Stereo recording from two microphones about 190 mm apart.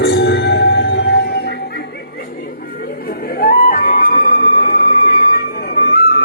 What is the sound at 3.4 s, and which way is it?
Music, 50° left (ahead or behind).